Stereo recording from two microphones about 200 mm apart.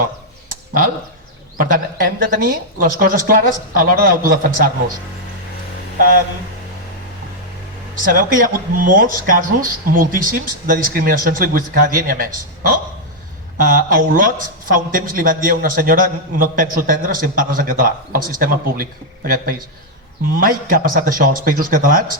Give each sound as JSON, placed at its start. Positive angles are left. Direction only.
{"t": 0.4, "sound": "a sound", "side_deg": -45}
{"t": 1.5, "sound": "speech", "side_deg": -45}
{"t": 6.0, "sound": "speech", "side_deg": -45}
{"t": 7.9, "sound": "speech", "side_deg": -45}